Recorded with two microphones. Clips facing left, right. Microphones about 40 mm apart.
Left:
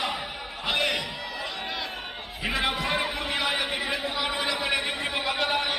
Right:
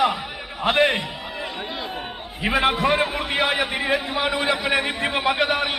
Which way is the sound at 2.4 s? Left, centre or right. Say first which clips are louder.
Right 8 dB; right.